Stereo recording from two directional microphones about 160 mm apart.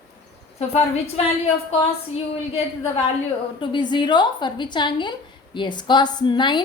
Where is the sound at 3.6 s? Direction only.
30° left (ahead or behind).